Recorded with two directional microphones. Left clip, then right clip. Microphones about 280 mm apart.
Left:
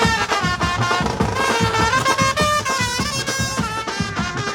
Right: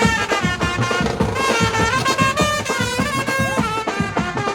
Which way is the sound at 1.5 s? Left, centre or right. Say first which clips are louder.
Left 1 dB; left.